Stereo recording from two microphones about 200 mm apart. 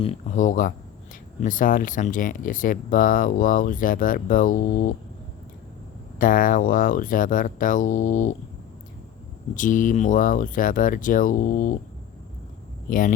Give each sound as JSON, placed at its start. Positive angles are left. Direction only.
{"t": 0.0, "sound": "speech", "side_deg": 35}
{"t": 6.1, "sound": "speech", "side_deg": 45}
{"t": 9.6, "sound": "speech", "side_deg": 40}
{"t": 12.9, "sound": "speech", "side_deg": 45}